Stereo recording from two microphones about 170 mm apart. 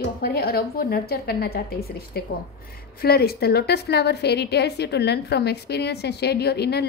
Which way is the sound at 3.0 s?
65° left (ahead or behind).